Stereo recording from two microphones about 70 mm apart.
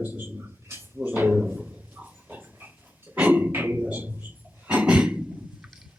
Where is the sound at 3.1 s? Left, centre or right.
Right.